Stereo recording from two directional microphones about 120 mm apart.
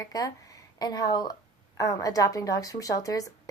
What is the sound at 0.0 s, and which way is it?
A woman's voice, 30° left (ahead or behind).